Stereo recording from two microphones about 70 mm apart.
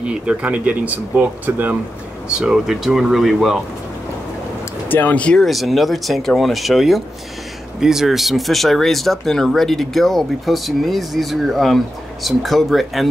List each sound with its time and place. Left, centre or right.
0.0 s speech: centre
2.3 s speech: centre
4.8 s speech: left
5.4 s speech: centre